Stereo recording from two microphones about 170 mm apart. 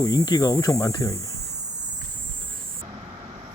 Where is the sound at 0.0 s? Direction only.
25° left (ahead or behind).